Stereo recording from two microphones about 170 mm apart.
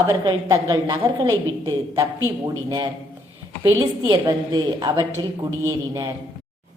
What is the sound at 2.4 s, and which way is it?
A woman's voice, 20° right (ahead or behind).